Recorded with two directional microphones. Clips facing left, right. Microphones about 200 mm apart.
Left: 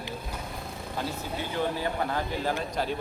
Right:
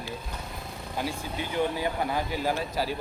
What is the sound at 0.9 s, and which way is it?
Speech, 15° right (ahead or behind).